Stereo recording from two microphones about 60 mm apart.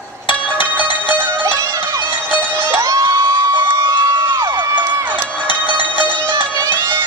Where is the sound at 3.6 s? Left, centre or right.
Right.